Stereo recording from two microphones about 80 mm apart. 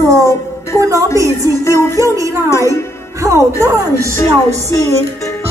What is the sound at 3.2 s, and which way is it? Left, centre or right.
Speech, right.